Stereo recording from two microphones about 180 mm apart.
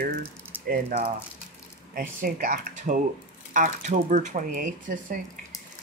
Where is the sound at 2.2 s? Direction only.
50° right (ahead or behind).